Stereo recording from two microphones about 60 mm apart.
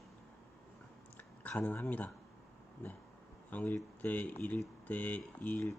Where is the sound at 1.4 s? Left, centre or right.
Left.